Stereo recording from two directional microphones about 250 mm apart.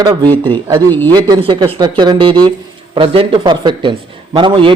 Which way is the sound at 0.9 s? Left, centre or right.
Centre.